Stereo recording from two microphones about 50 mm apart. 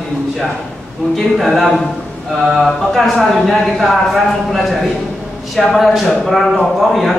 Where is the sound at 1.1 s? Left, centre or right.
Centre.